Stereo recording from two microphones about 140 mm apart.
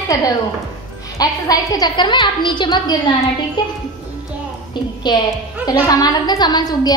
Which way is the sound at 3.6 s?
30° left (ahead or behind).